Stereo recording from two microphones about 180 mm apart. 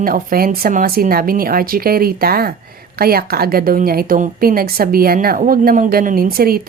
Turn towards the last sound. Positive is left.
turn(degrees=-55)  # may be behind; listen again after turning